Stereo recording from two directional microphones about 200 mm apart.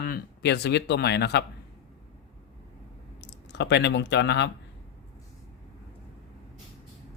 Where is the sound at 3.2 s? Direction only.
60° left (ahead or behind).